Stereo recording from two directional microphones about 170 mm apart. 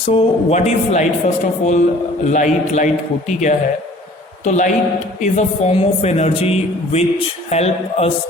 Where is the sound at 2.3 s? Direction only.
45° left (ahead or behind).